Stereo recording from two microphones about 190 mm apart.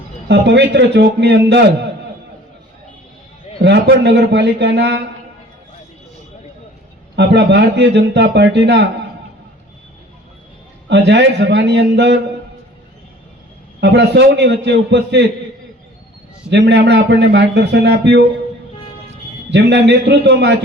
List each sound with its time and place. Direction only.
0.3 s a man's voice: 65° right (ahead or behind)
3.6 s a man's voice: 65° right (ahead or behind)
7.2 s a man's voice: 65° right (ahead or behind)
10.8 s a man's voice: 65° right (ahead or behind)
13.8 s a man's voice: 65° right (ahead or behind)
16.5 s a man's voice: 65° right (ahead or behind)
19.5 s a man's voice: 65° right (ahead or behind)